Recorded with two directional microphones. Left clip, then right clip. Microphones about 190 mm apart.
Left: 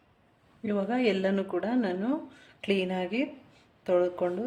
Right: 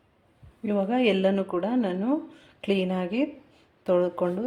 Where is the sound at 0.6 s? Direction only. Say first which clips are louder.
Right 4 dB; 20° right (ahead or behind).